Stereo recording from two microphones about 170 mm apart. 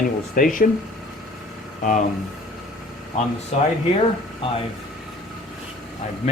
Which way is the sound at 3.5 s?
40° left (ahead or behind).